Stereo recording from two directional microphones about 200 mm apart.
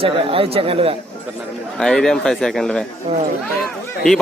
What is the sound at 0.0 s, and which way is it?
Speech, 30° right (ahead or behind).